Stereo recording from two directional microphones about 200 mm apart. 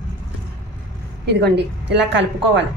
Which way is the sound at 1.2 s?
55° right (ahead or behind).